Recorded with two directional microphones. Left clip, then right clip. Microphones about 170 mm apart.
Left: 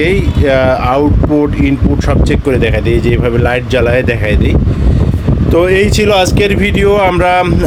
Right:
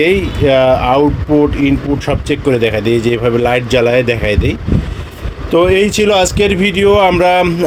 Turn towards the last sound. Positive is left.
turn(degrees=0)  # may be behind; listen again after turning